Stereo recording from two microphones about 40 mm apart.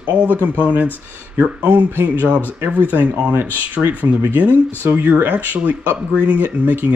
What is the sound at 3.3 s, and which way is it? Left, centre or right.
Speech, right.